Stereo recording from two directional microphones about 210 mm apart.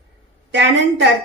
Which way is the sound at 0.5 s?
55° right (ahead or behind).